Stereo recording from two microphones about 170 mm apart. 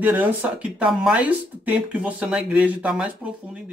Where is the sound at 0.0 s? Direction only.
10° right (ahead or behind).